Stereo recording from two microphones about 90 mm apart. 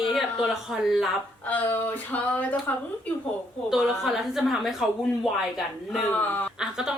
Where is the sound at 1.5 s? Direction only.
20° left (ahead or behind).